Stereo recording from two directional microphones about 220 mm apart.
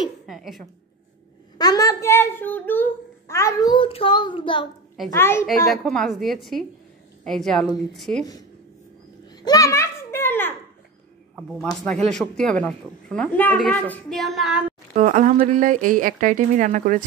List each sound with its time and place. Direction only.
0.0 s a woman's voice: centre (ahead or behind)
1.6 s a child's voice: 15° left (ahead or behind)
5.1 s a child's voice: 10° left (ahead or behind)
5.7 s a woman's voice: centre (ahead or behind)
9.3 s a child's voice: 20° left (ahead or behind); by 14.6 s centre (ahead or behind)
15.0 s speech: 35° right (ahead or behind)